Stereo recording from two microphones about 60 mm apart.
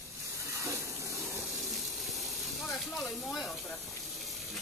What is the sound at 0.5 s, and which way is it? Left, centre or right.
Hiss, right.